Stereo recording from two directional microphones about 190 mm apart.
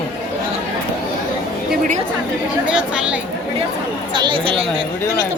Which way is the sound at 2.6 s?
5° right (ahead or behind).